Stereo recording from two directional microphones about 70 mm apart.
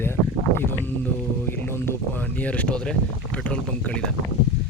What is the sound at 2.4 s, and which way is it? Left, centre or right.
Speech, centre.